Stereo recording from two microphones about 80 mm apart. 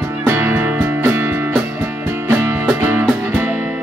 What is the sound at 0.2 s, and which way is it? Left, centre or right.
Music, right.